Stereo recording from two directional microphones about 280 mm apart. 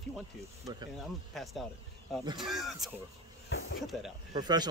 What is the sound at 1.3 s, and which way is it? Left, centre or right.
Speech, centre.